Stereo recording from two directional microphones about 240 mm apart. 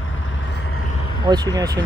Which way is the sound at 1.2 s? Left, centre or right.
Centre.